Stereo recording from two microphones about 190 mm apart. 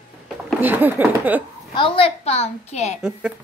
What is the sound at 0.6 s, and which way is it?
Speech, 10° right (ahead or behind).